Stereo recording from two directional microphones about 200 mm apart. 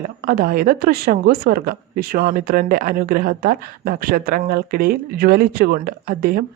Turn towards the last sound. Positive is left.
turn(degrees=-45)  # may be behind; listen again after turning